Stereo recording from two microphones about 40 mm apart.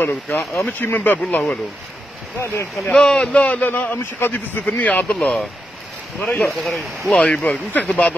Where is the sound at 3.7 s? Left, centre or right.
Left.